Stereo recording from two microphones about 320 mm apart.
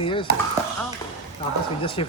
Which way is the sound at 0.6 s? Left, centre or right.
Centre.